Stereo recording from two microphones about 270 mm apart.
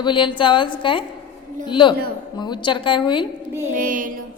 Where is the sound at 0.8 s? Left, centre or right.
Centre.